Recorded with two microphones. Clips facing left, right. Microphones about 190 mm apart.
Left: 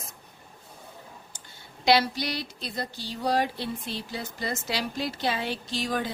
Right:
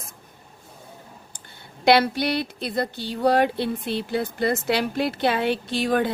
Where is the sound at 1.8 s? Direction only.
60° right (ahead or behind).